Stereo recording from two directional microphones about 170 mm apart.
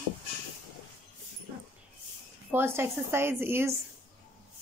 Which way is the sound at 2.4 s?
15° right (ahead or behind).